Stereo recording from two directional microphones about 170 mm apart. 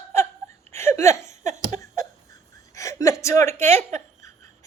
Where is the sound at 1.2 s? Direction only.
45° right (ahead or behind).